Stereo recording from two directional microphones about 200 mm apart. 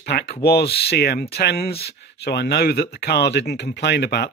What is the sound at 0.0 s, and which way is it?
Speech, 55° left (ahead or behind).